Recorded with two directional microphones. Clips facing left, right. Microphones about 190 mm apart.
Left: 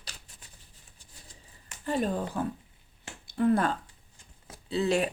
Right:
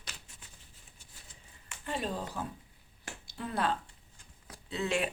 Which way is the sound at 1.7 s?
40° left (ahead or behind).